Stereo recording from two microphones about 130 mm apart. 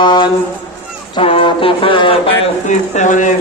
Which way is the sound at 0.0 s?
35° left (ahead or behind).